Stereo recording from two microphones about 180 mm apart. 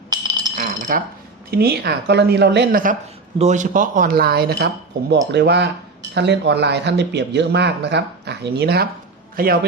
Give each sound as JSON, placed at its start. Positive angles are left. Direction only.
{"t": 0.1, "sound": "a sound", "side_deg": -20}
{"t": 0.5, "sound": "cutlery", "side_deg": -50}
{"t": 1.5, "sound": "speech", "side_deg": -60}
{"t": 3.3, "sound": "a man's voice", "side_deg": -40}